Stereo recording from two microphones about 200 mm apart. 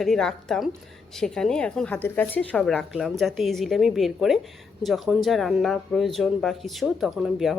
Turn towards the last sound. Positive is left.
turn(degrees=0)  # may be behind; listen again after turning